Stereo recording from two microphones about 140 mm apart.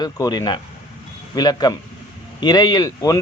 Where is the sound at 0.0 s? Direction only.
30° left (ahead or behind).